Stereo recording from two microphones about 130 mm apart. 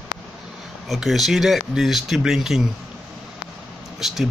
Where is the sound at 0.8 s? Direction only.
Centre (ahead or behind).